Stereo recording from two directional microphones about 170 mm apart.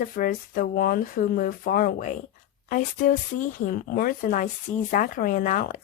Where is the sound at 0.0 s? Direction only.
55° left (ahead or behind).